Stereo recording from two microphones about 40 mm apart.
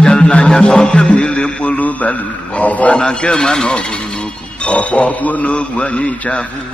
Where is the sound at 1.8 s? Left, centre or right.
Left.